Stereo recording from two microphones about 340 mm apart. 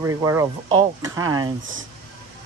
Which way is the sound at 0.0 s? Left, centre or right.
Centre.